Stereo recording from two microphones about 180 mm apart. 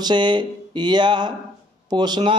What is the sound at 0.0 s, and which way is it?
A man's voice, 25° right (ahead or behind).